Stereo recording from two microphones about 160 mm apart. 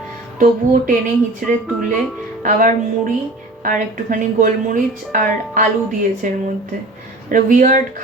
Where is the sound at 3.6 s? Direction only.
60° right (ahead or behind).